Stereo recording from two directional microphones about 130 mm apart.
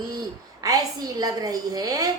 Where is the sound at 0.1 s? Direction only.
30° right (ahead or behind).